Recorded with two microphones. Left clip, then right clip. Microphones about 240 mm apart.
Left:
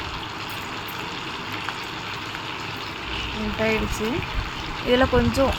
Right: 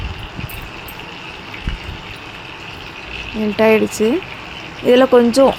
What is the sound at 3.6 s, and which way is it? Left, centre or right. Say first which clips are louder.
Speech: right 11 dB; right.